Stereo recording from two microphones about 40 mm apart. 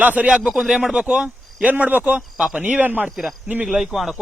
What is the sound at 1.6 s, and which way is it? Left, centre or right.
Speech, right.